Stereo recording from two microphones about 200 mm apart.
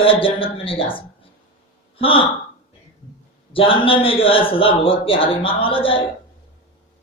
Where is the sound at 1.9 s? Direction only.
25° left (ahead or behind).